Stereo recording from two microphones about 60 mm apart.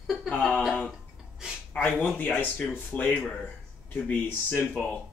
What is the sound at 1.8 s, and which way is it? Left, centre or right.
Speech, left.